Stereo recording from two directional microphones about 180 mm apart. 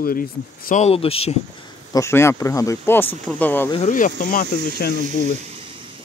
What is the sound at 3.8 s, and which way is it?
Speech, 45° left (ahead or behind).